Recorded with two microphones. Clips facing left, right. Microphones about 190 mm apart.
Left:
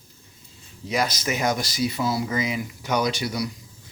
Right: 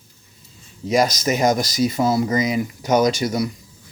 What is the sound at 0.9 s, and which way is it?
Speech, 40° right (ahead or behind).